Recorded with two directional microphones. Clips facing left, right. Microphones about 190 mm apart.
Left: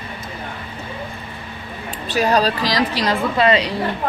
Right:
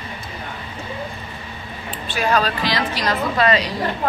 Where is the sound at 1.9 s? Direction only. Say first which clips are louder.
Left 3 dB; 40° left (ahead or behind).